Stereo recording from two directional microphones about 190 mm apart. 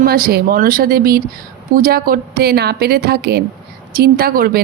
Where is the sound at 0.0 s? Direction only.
50° right (ahead or behind).